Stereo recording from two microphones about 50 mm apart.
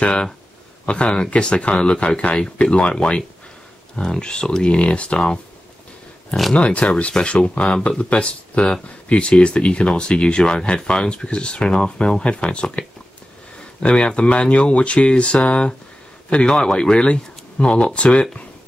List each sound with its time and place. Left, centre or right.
0.0 s speech: centre
6.5 s speech: left
13.8 s a man's voice: left